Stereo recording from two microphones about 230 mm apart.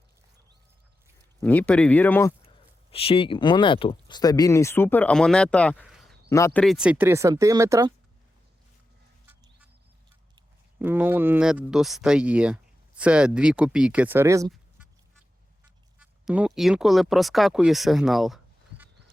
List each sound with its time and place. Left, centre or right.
1.4 s speech: centre
2.9 s speech: left; by 5.8 s centre
5.8 s a sound: centre
6.2 s speech: centre
9.3 s a sound: centre
10.8 s speech: centre
16.0 s speech: centre